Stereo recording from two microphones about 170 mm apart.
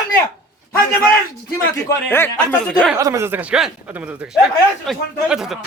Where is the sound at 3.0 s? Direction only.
15° right (ahead or behind); by 5.5 s centre (ahead or behind).